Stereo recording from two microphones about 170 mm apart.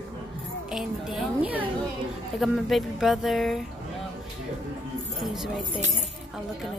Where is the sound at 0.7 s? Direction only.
5° right (ahead or behind).